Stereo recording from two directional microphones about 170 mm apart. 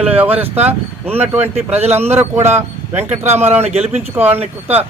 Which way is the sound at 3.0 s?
40° right (ahead or behind).